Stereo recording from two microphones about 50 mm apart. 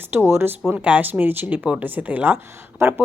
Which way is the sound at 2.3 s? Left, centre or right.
Right.